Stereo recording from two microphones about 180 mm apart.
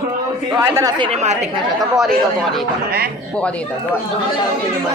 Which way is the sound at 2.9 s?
60° right (ahead or behind).